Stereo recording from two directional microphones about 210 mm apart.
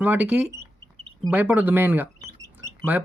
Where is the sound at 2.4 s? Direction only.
10° right (ahead or behind).